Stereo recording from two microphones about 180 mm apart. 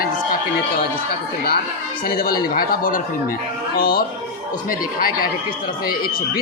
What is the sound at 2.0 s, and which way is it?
A man's voice, 55° left (ahead or behind).